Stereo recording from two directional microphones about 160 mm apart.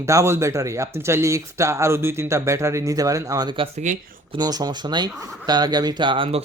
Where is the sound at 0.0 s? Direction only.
20° right (ahead or behind).